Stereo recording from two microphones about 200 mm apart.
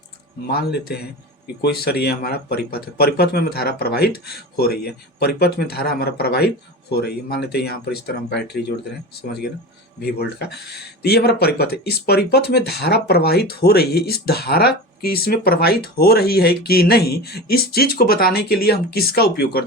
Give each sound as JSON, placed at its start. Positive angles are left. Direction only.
{"t": 0.4, "sound": "speech", "side_deg": 50}
{"t": 10.0, "sound": "speech", "side_deg": 55}